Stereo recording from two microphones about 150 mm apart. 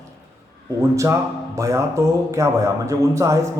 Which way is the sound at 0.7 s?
20° right (ahead or behind).